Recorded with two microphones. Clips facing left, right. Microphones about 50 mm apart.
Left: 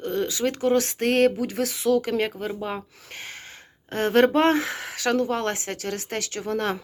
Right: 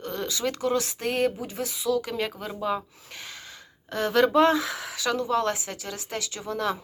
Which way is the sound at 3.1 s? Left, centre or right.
Left.